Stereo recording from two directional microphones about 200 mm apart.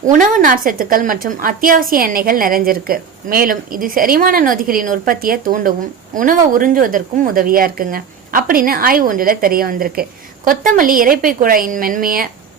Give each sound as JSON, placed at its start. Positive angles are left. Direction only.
{"t": 0.0, "sound": "a woman's voice", "side_deg": -40}